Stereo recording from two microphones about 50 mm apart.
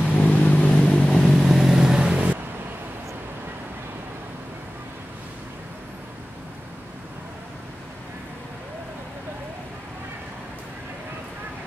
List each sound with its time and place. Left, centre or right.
0.2 s vehicle: left
1.2 s vehicle: centre